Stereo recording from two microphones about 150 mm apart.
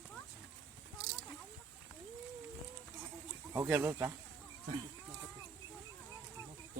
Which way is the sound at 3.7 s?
10° right (ahead or behind).